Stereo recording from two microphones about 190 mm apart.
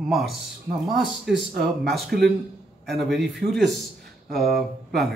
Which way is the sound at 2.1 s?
55° right (ahead or behind).